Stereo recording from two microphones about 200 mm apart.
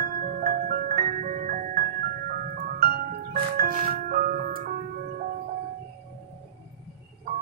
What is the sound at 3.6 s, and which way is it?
Music, 45° right (ahead or behind).